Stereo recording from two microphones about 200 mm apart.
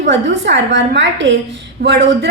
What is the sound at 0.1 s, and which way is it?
A woman's voice, 65° right (ahead or behind).